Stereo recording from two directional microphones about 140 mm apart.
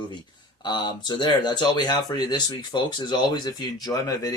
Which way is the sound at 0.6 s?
30° left (ahead or behind).